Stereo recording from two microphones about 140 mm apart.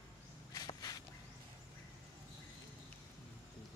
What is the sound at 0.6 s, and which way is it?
Walk, 25° left (ahead or behind).